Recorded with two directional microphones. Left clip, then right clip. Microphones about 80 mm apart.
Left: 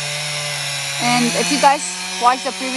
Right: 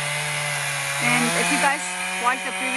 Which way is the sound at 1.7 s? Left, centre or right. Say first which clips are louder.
Left 2 dB; centre.